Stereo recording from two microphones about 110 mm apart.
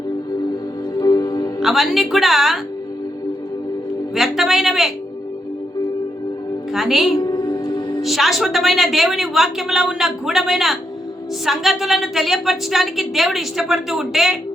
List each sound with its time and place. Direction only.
0.9 s music: 35° left (ahead or behind)
1.6 s a woman's voice: centre (ahead or behind)
4.1 s a woman's voice: 5° right (ahead or behind)
6.7 s a woman's voice: centre (ahead or behind)
7.2 s music: 45° left (ahead or behind)
7.5 s music: 30° left (ahead or behind)
8.0 s a woman's voice: centre (ahead or behind)